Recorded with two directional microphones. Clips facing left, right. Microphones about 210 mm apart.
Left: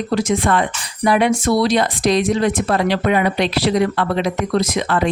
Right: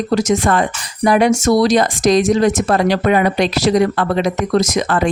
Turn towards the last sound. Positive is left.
turn(degrees=-45)  # may be behind; listen again after turning